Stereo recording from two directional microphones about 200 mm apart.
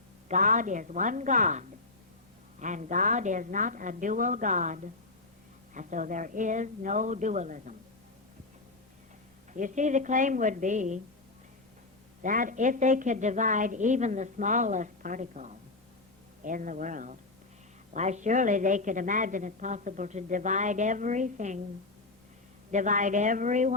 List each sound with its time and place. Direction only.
0.3 s a woman's voice: 40° right (ahead or behind)
9.5 s a woman's voice: 40° right (ahead or behind)
12.2 s a woman's voice: 40° right (ahead or behind)
22.7 s a woman's voice: 40° right (ahead or behind)